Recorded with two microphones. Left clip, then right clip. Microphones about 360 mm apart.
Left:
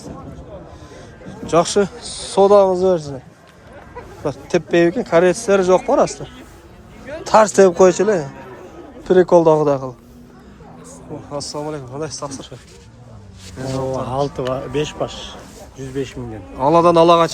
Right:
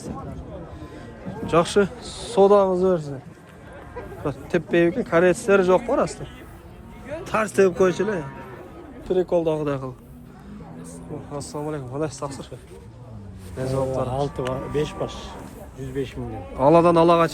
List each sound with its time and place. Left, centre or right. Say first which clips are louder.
1.5 s speech: left 4 dB; centre
4.2 s speech: left 6 dB; centre
9.0 s speech: left 10 dB; left
11.3 s speech: left 5 dB; centre
14.0 s speech: left 4 dB; left
16.6 s a man's voice: left 4 dB; centre